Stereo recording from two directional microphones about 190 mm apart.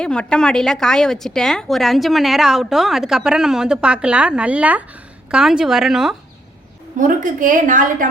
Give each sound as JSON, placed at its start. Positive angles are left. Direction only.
{"t": 0.0, "sound": "speech", "side_deg": 5}
{"t": 6.9, "sound": "a woman's voice", "side_deg": -45}